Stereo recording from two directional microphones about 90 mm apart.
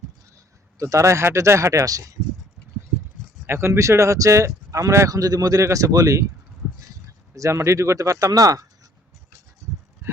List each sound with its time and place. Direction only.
0.8 s speech: 35° right (ahead or behind)
3.4 s speech: 30° right (ahead or behind)
7.3 s speech: 35° right (ahead or behind)